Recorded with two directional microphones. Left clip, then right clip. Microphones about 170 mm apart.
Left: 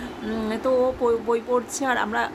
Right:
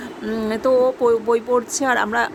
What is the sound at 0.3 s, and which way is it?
A woman's voice, 30° right (ahead or behind).